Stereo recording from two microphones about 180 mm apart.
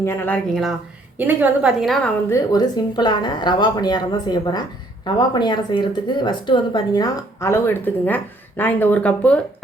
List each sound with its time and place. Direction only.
0.0 s speech: 15° left (ahead or behind)
0.5 s a woman's voice: centre (ahead or behind)
2.3 s a woman's voice: 20° left (ahead or behind)